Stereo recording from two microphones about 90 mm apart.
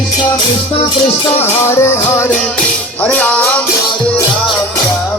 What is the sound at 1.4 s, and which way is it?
Music, 30° left (ahead or behind).